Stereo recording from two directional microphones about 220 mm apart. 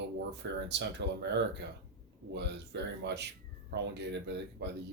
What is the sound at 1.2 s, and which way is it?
Speech, 50° right (ahead or behind).